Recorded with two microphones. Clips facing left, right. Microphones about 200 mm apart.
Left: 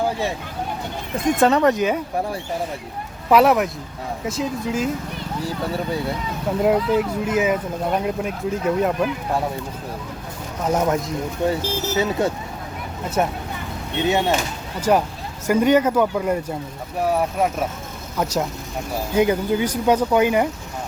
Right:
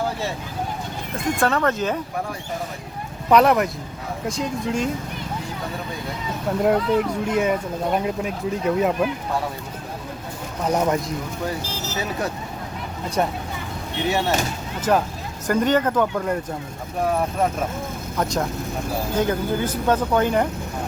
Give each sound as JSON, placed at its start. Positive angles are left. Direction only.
{"t": 1.4, "sound": "speech", "side_deg": 20}
{"t": 3.2, "sound": "speech", "side_deg": 5}
{"t": 6.6, "sound": "speech", "side_deg": 0}
{"t": 10.7, "sound": "speech", "side_deg": 0}
{"t": 13.2, "sound": "speech", "side_deg": 5}
{"t": 13.9, "sound": "speech", "side_deg": 20}